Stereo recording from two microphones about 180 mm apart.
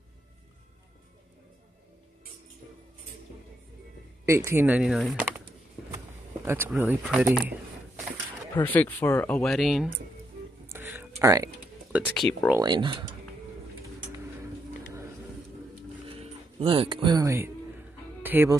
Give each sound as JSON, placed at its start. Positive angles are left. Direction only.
{"t": 4.3, "sound": "speech", "side_deg": -15}
{"t": 6.4, "sound": "speech", "side_deg": -10}
{"t": 8.6, "sound": "speech", "side_deg": 10}
{"t": 10.7, "sound": "a sound", "side_deg": -10}
{"t": 12.1, "sound": "speech", "side_deg": 0}
{"t": 12.5, "sound": "speech", "side_deg": -25}
{"t": 16.1, "sound": "speech", "side_deg": -35}